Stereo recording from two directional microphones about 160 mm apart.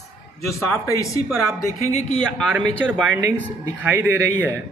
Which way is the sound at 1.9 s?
45° left (ahead or behind).